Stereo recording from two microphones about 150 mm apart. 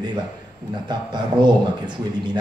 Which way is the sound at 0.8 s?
30° right (ahead or behind).